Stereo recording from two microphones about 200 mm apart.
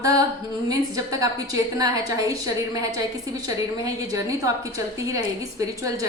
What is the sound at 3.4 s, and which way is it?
Speech, 15° right (ahead or behind).